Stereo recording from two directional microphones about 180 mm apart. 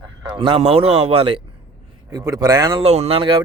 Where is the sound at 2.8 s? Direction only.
35° right (ahead or behind).